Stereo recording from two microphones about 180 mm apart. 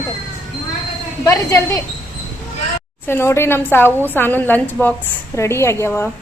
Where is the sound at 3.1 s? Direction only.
15° left (ahead or behind).